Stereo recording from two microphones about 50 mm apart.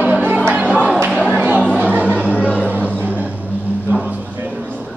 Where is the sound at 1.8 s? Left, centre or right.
Right.